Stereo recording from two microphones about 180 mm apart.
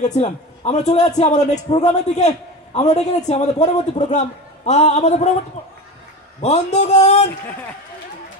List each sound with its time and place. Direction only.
0.0 s a man's voice: 40° left (ahead or behind)
6.4 s a man's voice: 40° left (ahead or behind)